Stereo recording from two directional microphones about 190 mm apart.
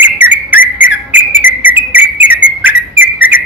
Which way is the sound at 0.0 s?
10° right (ahead or behind).